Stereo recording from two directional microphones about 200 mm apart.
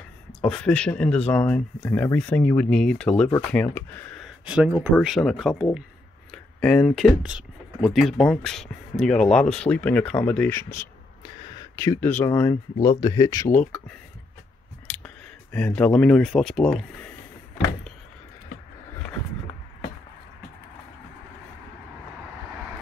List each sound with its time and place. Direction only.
0.4 s speech: 5° left (ahead or behind)
4.5 s speech: 5° right (ahead or behind); by 10.9 s 10° left (ahead or behind)
11.2 s a sound: 15° left (ahead or behind)
12.8 s speech: 20° left (ahead or behind)
13.7 s speech: 5° left (ahead or behind)